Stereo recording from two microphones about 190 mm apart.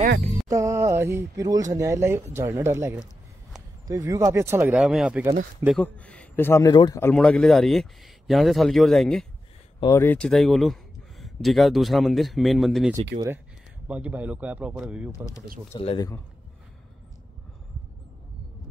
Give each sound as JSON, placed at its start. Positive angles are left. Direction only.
{"t": 0.5, "sound": "speech", "side_deg": -15}
{"t": 5.8, "sound": "a man's voice", "side_deg": 5}
{"t": 9.8, "sound": "a man's voice", "side_deg": 15}
{"t": 15.7, "sound": "speech", "side_deg": 30}